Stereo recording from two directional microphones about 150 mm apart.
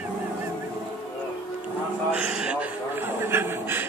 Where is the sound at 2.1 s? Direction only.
5° right (ahead or behind).